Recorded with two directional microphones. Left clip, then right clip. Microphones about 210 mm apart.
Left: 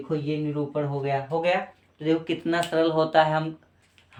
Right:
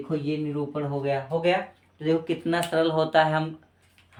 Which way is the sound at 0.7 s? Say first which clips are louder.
Even; 20° left (ahead or behind).